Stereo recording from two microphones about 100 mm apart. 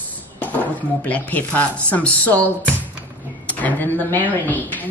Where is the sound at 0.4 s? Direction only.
15° left (ahead or behind).